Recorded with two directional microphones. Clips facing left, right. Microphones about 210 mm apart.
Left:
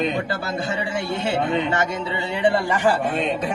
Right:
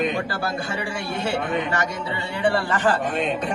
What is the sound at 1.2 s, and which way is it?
A man's voice, 25° left (ahead or behind).